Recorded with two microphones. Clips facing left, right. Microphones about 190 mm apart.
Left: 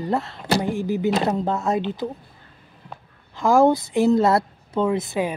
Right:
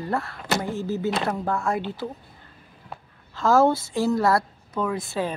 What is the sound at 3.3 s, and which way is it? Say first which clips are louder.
A woman's voice: left 2 dB; 15° left (ahead or behind).